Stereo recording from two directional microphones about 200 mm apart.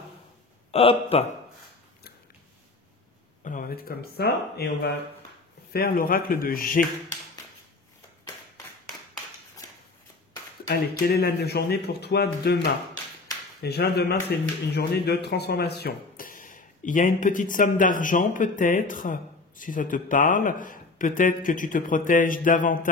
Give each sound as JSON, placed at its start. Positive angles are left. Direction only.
{"t": 0.7, "sound": "a man's voice", "side_deg": 30}
{"t": 3.4, "sound": "speech", "side_deg": 45}
{"t": 10.7, "sound": "speech", "side_deg": 50}